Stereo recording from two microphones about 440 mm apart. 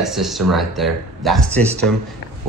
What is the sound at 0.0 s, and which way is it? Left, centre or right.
Speech, centre.